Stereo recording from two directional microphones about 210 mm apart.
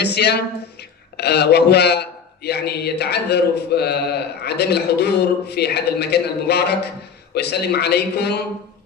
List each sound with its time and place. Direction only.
0.0 s speech: 50° left (ahead or behind)